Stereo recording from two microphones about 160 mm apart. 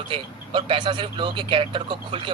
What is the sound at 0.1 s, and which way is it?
Speech, 30° right (ahead or behind).